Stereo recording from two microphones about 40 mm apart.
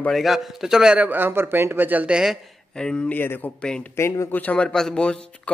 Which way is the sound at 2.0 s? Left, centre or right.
Centre.